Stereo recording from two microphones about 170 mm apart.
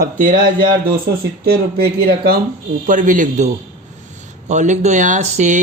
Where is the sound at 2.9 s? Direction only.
50° right (ahead or behind).